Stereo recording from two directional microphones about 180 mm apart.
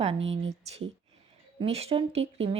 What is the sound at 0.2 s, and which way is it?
Speech, 90° right.